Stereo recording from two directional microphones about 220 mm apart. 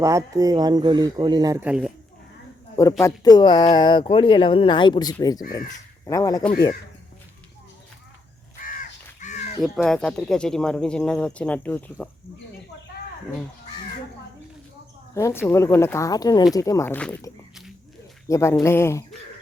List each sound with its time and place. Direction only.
0.0 s speech: 15° right (ahead or behind)
3.0 s speech: 20° left (ahead or behind)
8.5 s crow: 40° left (ahead or behind)
9.6 s speech: centre (ahead or behind)
15.1 s speech: 10° left (ahead or behind)